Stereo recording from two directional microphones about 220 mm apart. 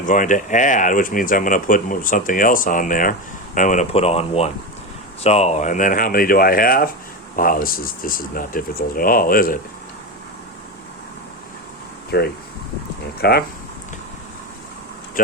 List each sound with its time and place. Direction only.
0.0 s speech: 35° left (ahead or behind)
12.1 s speech: 50° left (ahead or behind)